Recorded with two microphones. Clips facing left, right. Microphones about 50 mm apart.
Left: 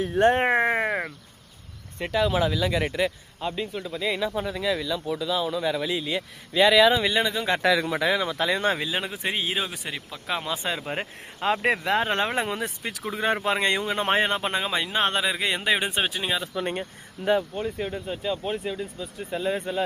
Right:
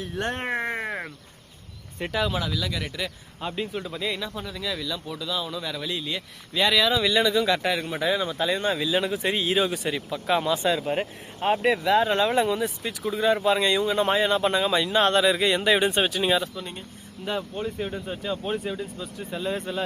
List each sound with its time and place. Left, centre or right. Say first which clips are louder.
0.0 s speech: left 9 dB; left
2.0 s speech: left 2 dB; centre
2.4 s speech: left 6 dB; left
3.4 s speech: even; centre
4.0 s speech: left 8 dB; centre
7.6 s speech: left 3 dB; left
8.9 s speech: right 4 dB; left
10.6 s speech: right 5 dB; left
10.8 s speech: right 4 dB; left
11.3 s speech: right 1 dB; left
11.8 s speech: right 3 dB; left
14.4 s speech: right 4 dB; left
17.5 s speech: even; centre
19.3 s speech: left 2 dB; centre